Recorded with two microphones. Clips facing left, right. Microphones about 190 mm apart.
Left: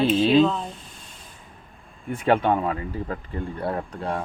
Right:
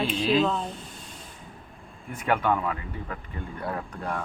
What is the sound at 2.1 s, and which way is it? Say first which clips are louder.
Speech: left 5 dB; 30° left (ahead or behind).